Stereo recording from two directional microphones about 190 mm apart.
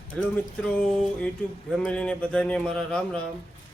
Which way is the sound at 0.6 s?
5° left (ahead or behind).